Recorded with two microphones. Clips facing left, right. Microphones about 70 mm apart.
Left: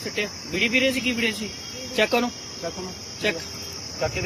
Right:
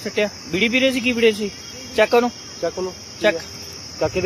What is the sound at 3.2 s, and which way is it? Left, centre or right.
Cricket, right.